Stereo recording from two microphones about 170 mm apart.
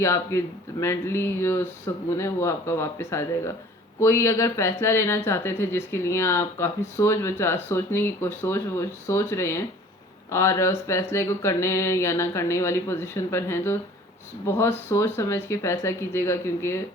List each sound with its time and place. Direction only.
0.0 s speech: 15° left (ahead or behind)